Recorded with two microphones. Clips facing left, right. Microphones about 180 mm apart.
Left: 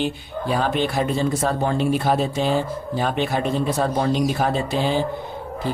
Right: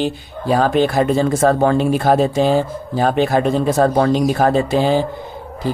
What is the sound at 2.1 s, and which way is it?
A man's voice, 45° right (ahead or behind).